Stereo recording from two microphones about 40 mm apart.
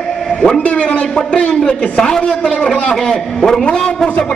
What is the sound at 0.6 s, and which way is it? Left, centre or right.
A man's voice, left.